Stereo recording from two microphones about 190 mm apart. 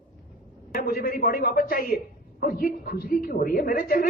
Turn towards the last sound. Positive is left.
turn(degrees=50)  # may be behind; listen again after turning